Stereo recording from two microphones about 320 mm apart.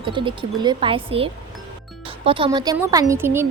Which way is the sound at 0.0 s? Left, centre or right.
Centre.